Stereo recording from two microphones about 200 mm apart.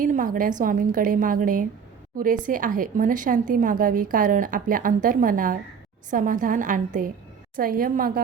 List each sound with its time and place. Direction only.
0.0 s a woman's voice: 40° right (ahead or behind)